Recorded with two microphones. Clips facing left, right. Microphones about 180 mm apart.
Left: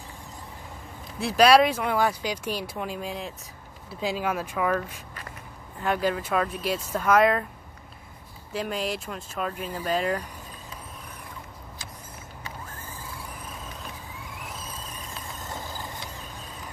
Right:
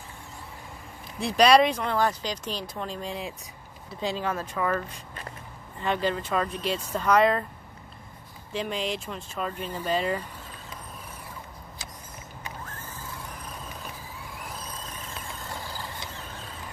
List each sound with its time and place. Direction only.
1.2 s speech: 5° left (ahead or behind)
8.5 s speech: 5° left (ahead or behind)
14.3 s vehicle: centre (ahead or behind)
15.5 s vehicle: 20° left (ahead or behind)